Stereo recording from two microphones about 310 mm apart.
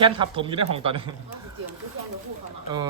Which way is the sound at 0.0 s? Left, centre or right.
Centre.